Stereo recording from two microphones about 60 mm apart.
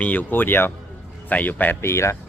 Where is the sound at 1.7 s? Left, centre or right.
Left.